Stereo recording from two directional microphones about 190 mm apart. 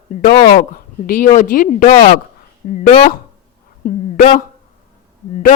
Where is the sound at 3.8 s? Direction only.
45° left (ahead or behind).